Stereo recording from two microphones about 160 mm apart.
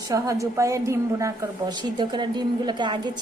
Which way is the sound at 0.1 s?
20° right (ahead or behind).